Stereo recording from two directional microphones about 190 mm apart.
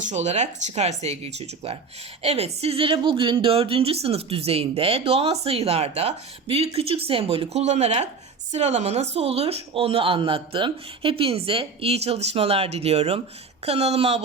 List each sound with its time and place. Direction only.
0.0 s speech: 35° right (ahead or behind)